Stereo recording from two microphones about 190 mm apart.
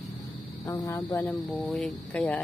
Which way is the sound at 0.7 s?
15° left (ahead or behind).